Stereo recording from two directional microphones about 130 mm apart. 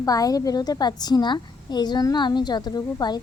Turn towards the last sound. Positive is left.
turn(degrees=30)  # may be behind; listen again after turning